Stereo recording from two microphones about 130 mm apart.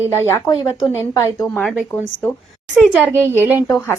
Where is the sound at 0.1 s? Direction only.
20° left (ahead or behind).